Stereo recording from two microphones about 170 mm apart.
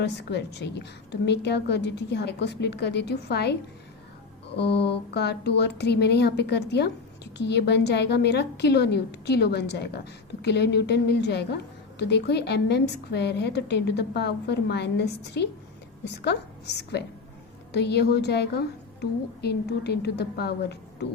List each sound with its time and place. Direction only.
0.0 s a woman's voice: 80° left
4.5 s a woman's voice: 85° left